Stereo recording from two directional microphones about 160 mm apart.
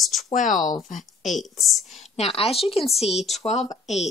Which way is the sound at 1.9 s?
45° left (ahead or behind).